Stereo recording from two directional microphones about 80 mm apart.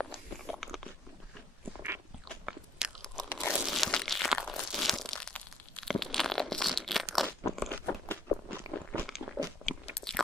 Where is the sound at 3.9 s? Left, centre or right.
Centre.